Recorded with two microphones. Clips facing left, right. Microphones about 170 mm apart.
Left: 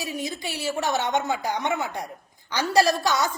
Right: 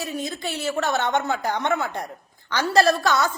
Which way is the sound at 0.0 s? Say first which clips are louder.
Right 2 dB; 15° left (ahead or behind).